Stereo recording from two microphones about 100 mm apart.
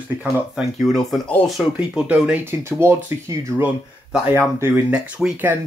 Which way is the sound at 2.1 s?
15° right (ahead or behind).